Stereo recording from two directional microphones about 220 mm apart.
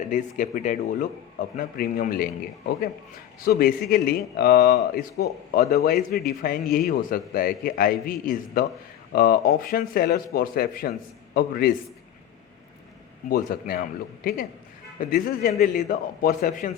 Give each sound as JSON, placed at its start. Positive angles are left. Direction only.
{"t": 0.1, "sound": "a man's voice", "side_deg": 35}
{"t": 3.4, "sound": "a man's voice", "side_deg": 45}
{"t": 13.3, "sound": "a man's voice", "side_deg": 40}
{"t": 14.9, "sound": "a man's voice", "side_deg": 40}